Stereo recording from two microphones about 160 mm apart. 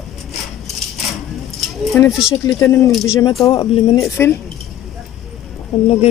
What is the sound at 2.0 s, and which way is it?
Speech, 10° left (ahead or behind).